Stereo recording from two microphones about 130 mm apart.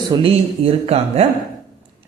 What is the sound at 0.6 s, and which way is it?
Speech, 50° right (ahead or behind).